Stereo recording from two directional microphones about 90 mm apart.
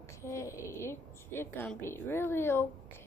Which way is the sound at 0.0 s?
35° left (ahead or behind).